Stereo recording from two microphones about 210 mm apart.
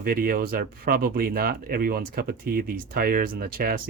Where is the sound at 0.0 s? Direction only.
45° right (ahead or behind).